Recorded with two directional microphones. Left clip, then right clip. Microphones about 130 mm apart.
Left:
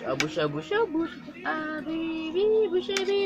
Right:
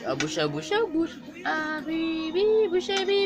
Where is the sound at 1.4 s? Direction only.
15° right (ahead or behind).